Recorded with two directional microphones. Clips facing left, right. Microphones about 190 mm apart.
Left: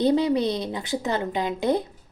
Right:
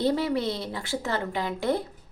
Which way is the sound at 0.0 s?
20° left (ahead or behind).